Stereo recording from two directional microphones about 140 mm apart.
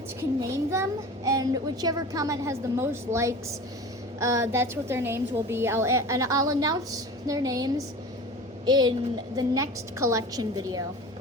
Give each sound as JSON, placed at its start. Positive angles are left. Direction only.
{"t": 0.2, "sound": "a woman's voice", "side_deg": -20}